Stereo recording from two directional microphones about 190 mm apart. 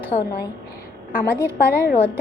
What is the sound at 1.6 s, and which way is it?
Speech, 55° left (ahead or behind).